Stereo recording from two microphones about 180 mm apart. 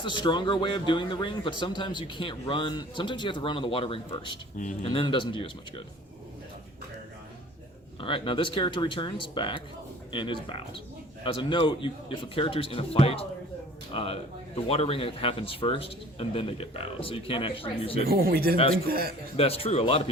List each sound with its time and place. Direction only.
0.0 s a man's voice: 25° left (ahead or behind)
8.0 s a man's voice: 30° left (ahead or behind)
18.0 s speech: 55° right (ahead or behind)
18.5 s speech: 30° left (ahead or behind)
18.9 s speech: 60° right (ahead or behind)
19.4 s speech: 35° left (ahead or behind)